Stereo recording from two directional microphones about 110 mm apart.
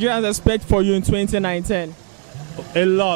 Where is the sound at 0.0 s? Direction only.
15° right (ahead or behind).